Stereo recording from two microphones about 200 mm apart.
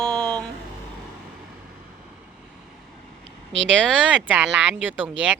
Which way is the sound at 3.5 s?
65° right (ahead or behind).